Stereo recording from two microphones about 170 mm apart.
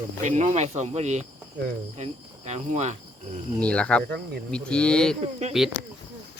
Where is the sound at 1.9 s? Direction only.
40° right (ahead or behind).